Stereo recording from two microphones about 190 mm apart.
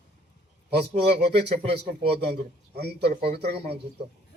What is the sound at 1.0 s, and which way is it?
A man's voice, 60° right (ahead or behind).